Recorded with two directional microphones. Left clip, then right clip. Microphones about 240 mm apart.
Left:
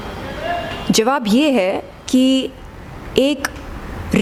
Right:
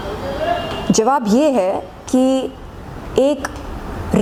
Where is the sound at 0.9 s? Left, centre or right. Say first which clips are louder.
Right 1 dB; centre.